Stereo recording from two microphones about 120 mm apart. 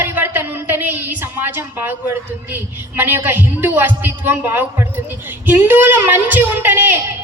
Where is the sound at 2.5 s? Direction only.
15° right (ahead or behind).